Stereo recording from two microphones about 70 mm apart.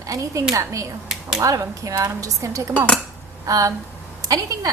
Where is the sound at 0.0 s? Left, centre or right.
Right.